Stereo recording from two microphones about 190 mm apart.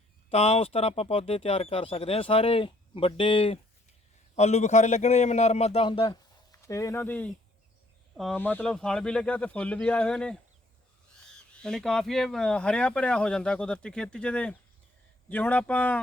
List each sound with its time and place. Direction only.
0.3 s a man's voice: 30° left (ahead or behind); by 10.3 s 5° left (ahead or behind)
11.5 s speech: 5° left (ahead or behind)